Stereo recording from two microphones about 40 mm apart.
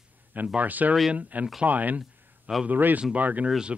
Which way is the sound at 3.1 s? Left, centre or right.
Right.